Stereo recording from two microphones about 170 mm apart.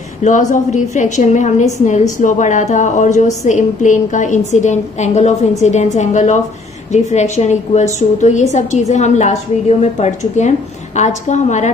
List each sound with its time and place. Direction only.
0.2 s a woman's voice: 45° left (ahead or behind)